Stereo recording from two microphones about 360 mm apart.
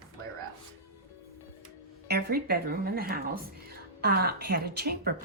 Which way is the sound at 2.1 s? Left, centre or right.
Right.